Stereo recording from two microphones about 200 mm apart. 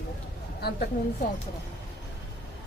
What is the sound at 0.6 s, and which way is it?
Speech, 50° left (ahead or behind).